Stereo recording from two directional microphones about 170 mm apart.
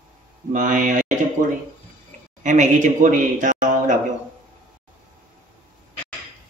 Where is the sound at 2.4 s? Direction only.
45° right (ahead or behind).